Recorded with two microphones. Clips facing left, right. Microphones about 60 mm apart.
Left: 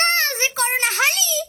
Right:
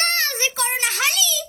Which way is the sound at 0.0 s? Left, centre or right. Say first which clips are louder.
Left 3 dB; left.